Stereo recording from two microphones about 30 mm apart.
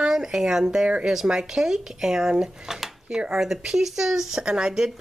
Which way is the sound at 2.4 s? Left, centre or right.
Centre.